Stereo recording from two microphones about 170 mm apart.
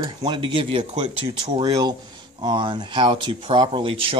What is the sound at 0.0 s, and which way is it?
A man's voice, 25° right (ahead or behind).